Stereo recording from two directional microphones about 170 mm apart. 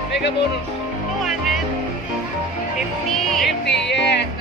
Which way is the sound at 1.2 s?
Centre (ahead or behind).